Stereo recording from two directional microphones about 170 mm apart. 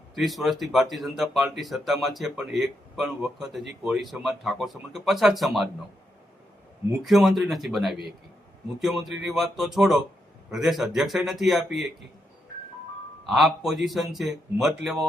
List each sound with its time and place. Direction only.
0.2 s speech: centre (ahead or behind)
7.0 s speech: centre (ahead or behind)
13.2 s speech: centre (ahead or behind)